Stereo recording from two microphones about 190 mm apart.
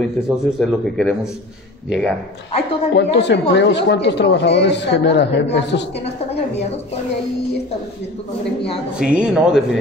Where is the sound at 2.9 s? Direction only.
65° left (ahead or behind).